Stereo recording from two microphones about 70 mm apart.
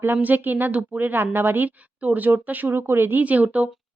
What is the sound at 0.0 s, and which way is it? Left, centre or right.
Speech, right.